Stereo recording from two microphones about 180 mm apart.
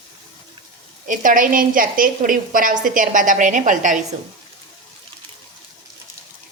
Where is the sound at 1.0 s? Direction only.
45° right (ahead or behind).